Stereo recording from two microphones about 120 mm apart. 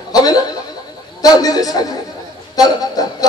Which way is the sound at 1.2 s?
30° left (ahead or behind).